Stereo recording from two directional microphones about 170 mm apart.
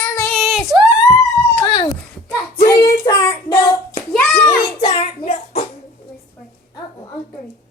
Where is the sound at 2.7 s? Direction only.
20° left (ahead or behind).